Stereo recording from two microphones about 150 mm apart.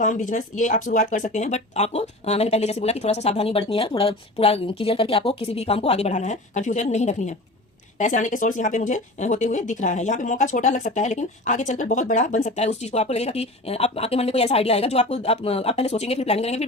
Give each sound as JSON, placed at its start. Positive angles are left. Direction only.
{"t": 0.0, "sound": "speech", "side_deg": 60}